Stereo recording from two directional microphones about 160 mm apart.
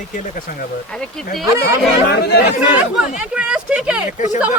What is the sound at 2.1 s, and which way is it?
Speech, 90° left.